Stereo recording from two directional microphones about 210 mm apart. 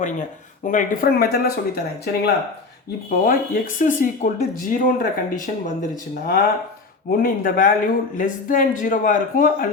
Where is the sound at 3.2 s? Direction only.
40° left (ahead or behind).